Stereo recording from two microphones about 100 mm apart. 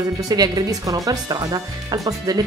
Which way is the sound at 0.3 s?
40° right (ahead or behind).